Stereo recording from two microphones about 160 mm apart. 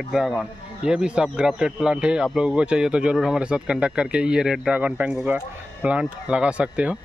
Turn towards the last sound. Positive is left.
turn(degrees=-5)  # may be behind; listen again after turning